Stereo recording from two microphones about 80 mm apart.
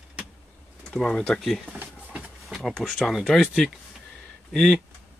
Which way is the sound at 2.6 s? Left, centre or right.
Centre.